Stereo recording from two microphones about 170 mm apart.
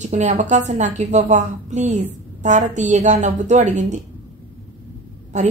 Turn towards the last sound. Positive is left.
turn(degrees=-45)  # may be behind; listen again after turning